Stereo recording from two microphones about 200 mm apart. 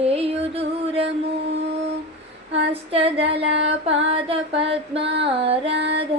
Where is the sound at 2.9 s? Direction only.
30° right (ahead or behind).